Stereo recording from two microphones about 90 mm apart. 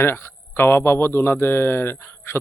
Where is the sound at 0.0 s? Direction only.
25° left (ahead or behind).